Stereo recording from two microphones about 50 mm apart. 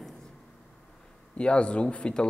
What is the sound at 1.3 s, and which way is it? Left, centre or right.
Speech, left.